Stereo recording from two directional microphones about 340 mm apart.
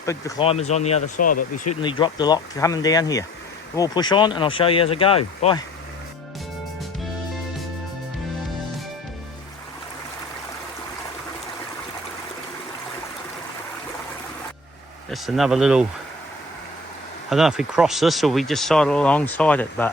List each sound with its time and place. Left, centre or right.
0.0 s speech: centre
15.1 s speech: centre
17.2 s speech: centre